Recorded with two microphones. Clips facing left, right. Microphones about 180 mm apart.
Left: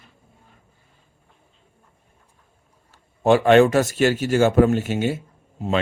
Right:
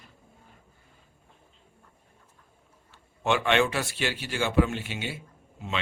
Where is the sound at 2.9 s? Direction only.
40° left (ahead or behind).